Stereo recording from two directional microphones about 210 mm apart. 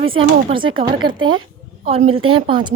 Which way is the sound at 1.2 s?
70° right (ahead or behind).